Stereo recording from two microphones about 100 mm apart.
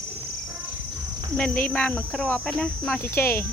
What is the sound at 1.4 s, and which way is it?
Speech, 15° left (ahead or behind).